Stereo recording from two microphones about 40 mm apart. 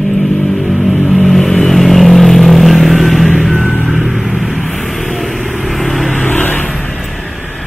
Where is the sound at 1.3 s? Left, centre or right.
Centre.